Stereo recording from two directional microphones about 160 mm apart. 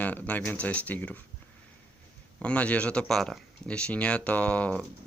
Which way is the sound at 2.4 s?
10° left (ahead or behind).